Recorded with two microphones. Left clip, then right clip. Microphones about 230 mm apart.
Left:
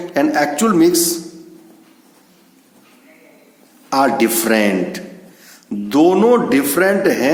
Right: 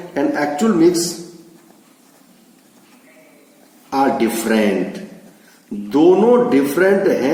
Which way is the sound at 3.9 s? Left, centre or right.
Left.